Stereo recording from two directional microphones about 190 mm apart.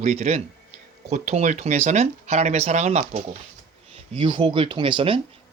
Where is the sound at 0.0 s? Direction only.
35° right (ahead or behind).